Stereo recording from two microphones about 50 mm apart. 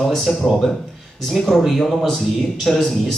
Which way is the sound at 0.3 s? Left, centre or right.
Centre.